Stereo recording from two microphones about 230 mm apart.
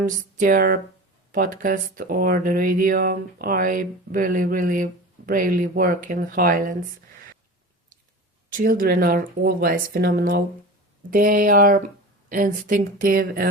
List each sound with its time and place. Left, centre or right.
0.0 s speech: right
8.5 s speech: right